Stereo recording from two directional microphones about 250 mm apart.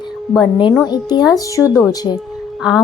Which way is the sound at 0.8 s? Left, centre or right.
Centre.